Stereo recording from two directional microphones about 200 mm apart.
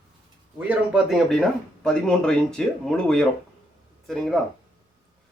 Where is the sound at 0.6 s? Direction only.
5° right (ahead or behind).